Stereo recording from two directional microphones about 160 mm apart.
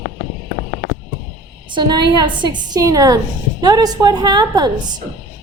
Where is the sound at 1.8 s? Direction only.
25° right (ahead or behind).